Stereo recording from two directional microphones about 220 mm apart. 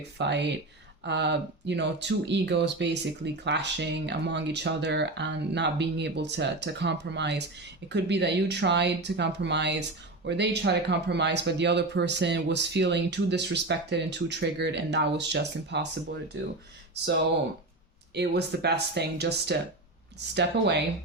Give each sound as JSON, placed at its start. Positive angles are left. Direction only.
{"t": 0.2, "sound": "speech", "side_deg": -50}
{"t": 18.1, "sound": "speech", "side_deg": -50}